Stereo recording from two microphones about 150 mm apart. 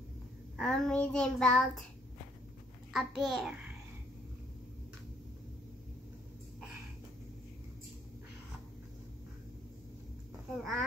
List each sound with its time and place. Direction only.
0.6 s child singing: 5° left (ahead or behind)
2.9 s child singing: centre (ahead or behind)
10.6 s child singing: centre (ahead or behind)